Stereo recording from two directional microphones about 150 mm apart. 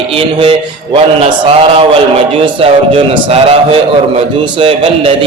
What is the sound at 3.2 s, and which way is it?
Speech, 40° right (ahead or behind).